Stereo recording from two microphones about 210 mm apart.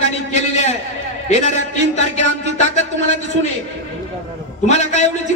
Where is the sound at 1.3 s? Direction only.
30° left (ahead or behind).